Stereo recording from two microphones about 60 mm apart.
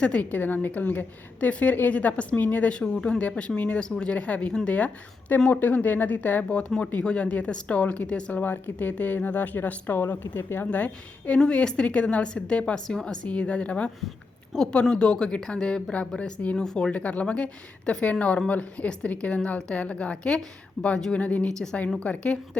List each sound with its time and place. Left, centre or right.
0.0 s a woman's voice: left
6.7 s a woman's voice: centre
8.4 s a woman's voice: left
11.3 s a woman's voice: centre
20.8 s speech: centre
21.1 s a woman's voice: left